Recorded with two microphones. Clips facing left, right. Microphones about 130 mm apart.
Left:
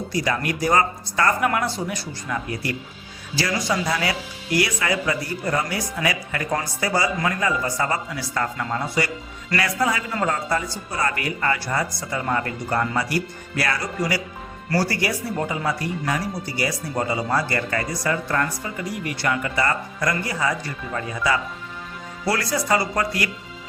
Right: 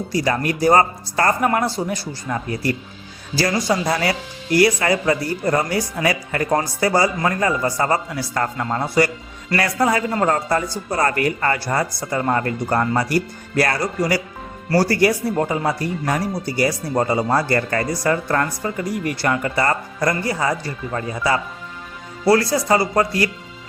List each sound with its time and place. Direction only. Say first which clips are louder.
0.1 s a man's voice: right 4 dB; 35° right (ahead or behind)